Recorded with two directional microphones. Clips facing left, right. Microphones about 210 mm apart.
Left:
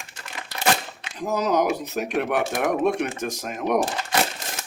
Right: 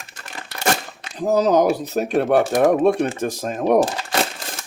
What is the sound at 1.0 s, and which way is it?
Speech, 35° right (ahead or behind).